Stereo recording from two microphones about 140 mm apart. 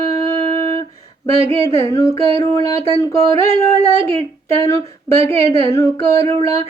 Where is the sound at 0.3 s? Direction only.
20° left (ahead or behind).